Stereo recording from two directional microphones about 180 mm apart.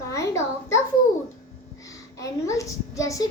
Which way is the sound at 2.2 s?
15° left (ahead or behind).